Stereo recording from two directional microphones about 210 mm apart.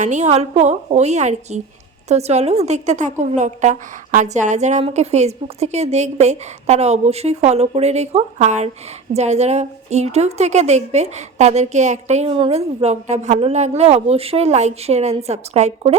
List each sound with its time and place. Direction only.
0.0 s a woman's voice: 35° right (ahead or behind)